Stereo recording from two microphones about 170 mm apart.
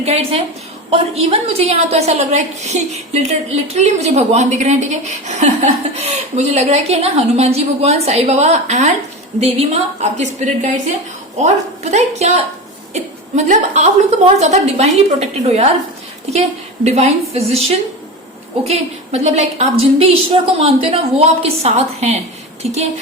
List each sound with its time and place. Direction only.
0.0 s a woman's voice: 35° right (ahead or behind)
16.8 s a woman's voice: 40° right (ahead or behind)